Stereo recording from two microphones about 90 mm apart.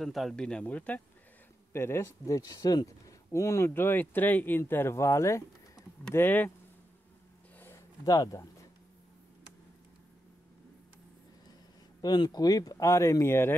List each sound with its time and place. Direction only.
0.0 s speech: centre (ahead or behind)
0.5 s speech: 15° left (ahead or behind)
1.7 s speech: 30° left (ahead or behind); by 3.2 s 45° left (ahead or behind)
3.3 s speech: 35° left (ahead or behind)
6.1 s speech: 20° left (ahead or behind)
7.5 s a sound: 25° left (ahead or behind)
8.0 s speech: 40° left (ahead or behind)
12.0 s speech: 50° left (ahead or behind); by 13.6 s 25° left (ahead or behind)